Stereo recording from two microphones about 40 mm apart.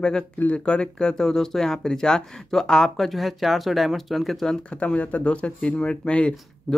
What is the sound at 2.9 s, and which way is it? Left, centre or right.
Speech, centre.